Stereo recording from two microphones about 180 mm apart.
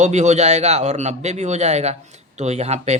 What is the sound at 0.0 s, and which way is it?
Speech, 40° right (ahead or behind).